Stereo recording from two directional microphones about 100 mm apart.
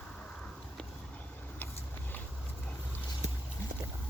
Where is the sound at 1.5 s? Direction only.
20° left (ahead or behind).